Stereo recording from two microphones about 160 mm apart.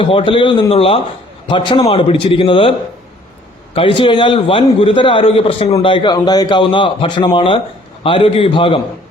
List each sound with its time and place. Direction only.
0.0 s a man's voice: 30° left (ahead or behind)
3.8 s a man's voice: 35° left (ahead or behind)